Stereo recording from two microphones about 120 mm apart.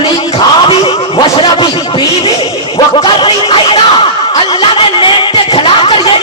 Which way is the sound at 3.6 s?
50° left (ahead or behind).